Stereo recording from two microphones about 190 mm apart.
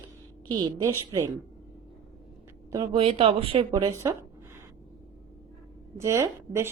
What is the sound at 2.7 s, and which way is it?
Speech, 25° right (ahead or behind).